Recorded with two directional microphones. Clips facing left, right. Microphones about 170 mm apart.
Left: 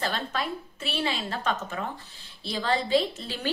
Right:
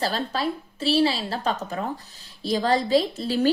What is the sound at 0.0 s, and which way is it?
A woman's voice, 35° right (ahead or behind).